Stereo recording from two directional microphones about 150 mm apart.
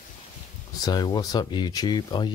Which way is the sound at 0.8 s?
25° left (ahead or behind).